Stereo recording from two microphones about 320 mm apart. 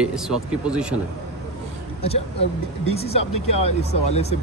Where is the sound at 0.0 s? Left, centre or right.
Centre.